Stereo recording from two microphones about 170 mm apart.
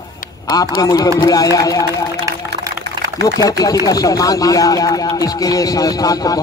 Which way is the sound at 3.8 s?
20° left (ahead or behind).